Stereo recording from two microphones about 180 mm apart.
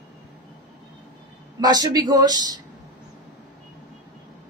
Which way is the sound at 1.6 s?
20° right (ahead or behind).